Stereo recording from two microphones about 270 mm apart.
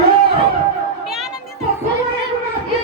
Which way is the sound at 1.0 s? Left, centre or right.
Centre.